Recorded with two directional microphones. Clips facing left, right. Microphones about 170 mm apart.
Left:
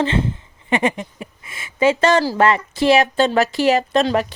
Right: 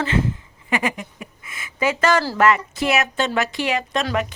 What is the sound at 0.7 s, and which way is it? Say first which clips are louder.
Speech: left 4 dB; 30° left (ahead or behind).